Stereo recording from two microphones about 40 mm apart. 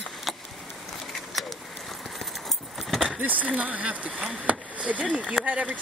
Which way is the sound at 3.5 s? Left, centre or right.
Right.